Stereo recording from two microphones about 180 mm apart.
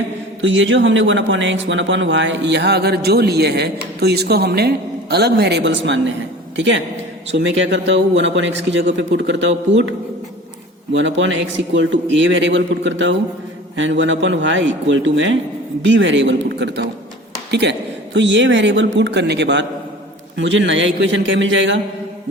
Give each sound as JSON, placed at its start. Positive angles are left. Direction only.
{"t": 0.4, "sound": "a man's voice", "side_deg": -90}
{"t": 10.9, "sound": "a man's voice", "side_deg": -90}
{"t": 20.4, "sound": "a man's voice", "side_deg": -90}